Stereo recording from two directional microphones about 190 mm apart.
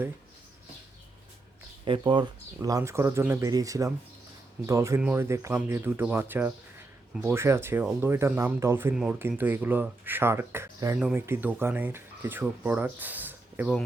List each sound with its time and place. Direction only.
1.8 s speech: 25° right (ahead or behind); by 13.7 s 10° right (ahead or behind)